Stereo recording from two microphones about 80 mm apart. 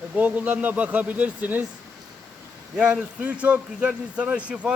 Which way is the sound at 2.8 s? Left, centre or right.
Centre.